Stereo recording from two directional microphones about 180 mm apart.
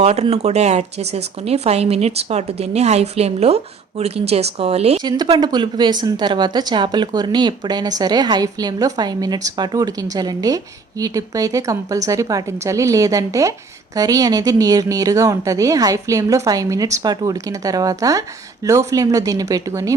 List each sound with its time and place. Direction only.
0.0 s speech: 35° right (ahead or behind)
5.1 s speech: 25° right (ahead or behind)